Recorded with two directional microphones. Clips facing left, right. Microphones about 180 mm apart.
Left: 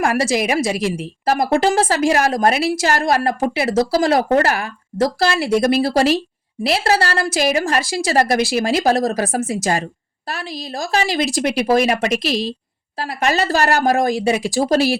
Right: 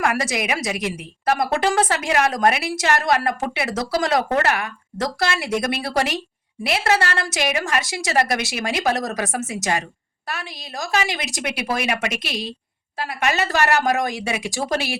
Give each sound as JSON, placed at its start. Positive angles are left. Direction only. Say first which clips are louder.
{"t": 0.0, "sound": "a woman's voice", "louder": "left 5 dB", "side_deg": 30}